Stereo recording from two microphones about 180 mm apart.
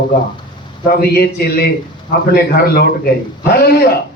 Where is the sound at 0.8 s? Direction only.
60° left (ahead or behind).